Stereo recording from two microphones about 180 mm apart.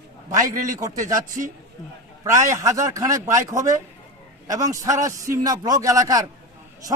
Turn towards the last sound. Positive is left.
turn(degrees=-20)  # may be behind; listen again after turning